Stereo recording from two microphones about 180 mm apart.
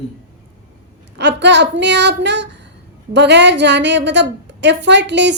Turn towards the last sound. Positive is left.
turn(degrees=-75)  # may be behind; listen again after turning